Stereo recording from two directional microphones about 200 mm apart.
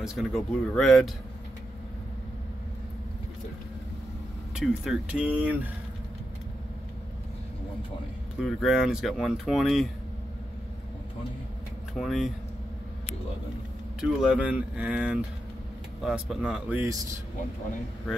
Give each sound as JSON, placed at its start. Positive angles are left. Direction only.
{"t": 0.0, "sound": "speech", "side_deg": 0}
{"t": 4.6, "sound": "speech", "side_deg": -5}
{"t": 8.4, "sound": "speech", "side_deg": 0}
{"t": 12.0, "sound": "speech", "side_deg": 0}
{"t": 14.0, "sound": "speech", "side_deg": -5}